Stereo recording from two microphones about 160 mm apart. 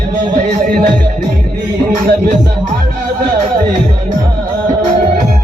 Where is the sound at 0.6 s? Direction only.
55° right (ahead or behind).